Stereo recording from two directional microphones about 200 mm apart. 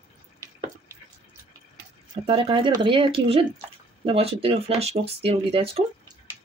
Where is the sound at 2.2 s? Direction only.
30° right (ahead or behind).